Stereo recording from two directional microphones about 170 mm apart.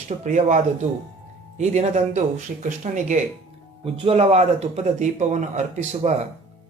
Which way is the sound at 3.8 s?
35° right (ahead or behind).